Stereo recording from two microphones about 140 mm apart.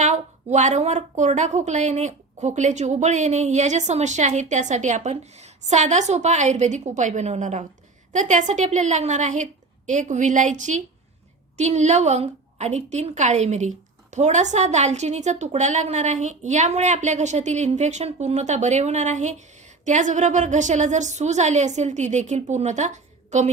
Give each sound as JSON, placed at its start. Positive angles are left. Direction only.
{"t": 0.0, "sound": "a woman's voice", "side_deg": -60}